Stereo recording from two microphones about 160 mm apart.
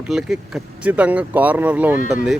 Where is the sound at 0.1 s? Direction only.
5° right (ahead or behind).